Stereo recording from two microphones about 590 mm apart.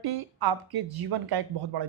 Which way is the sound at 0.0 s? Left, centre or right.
Right.